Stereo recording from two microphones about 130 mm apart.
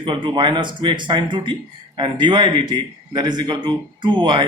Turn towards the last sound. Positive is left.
turn(degrees=-40)  # may be behind; listen again after turning